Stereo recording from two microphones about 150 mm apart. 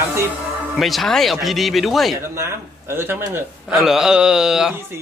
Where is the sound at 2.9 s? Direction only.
15° right (ahead or behind).